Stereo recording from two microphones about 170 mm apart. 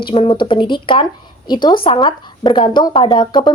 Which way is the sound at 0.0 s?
30° left (ahead or behind).